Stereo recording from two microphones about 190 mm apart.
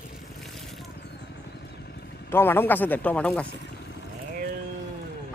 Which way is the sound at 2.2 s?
10° left (ahead or behind).